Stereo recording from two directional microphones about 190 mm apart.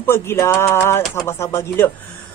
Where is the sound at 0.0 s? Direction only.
10° left (ahead or behind).